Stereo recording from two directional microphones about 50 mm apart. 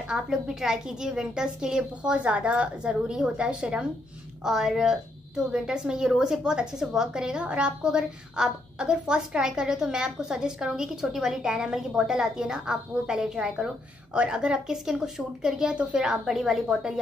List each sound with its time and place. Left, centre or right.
0.1 s a woman's voice: centre
4.5 s a woman's voice: centre
15.7 s a woman's voice: right
16.0 s a woman's voice: centre